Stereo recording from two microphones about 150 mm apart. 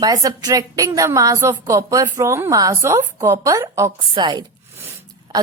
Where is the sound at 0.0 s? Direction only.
25° right (ahead or behind).